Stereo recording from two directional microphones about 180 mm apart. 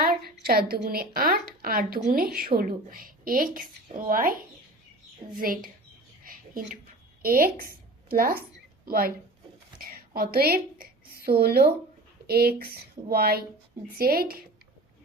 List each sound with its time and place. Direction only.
0.0 s a sound: 60° right (ahead or behind)
0.4 s a woman's voice: 55° right (ahead or behind)
2.0 s a woman's voice: 45° right (ahead or behind)
2.2 s a woman's voice: 55° right (ahead or behind)
6.2 s a sound: 50° right (ahead or behind)
7.2 s a woman's voice: 55° right (ahead or behind)
10.2 s a woman's voice: 60° right (ahead or behind)